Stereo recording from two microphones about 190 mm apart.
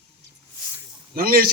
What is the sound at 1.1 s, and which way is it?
Speech, 50° right (ahead or behind).